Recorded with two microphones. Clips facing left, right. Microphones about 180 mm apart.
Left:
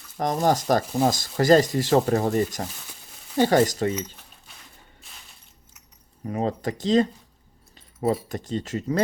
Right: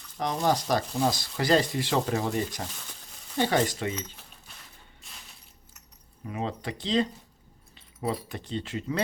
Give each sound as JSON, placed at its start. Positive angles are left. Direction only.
{"t": 0.2, "sound": "speech", "side_deg": 45}
{"t": 2.8, "sound": "a sound", "side_deg": 10}
{"t": 3.4, "sound": "speech", "side_deg": 45}
{"t": 5.0, "sound": "crushing", "side_deg": 0}
{"t": 6.2, "sound": "speech", "side_deg": 40}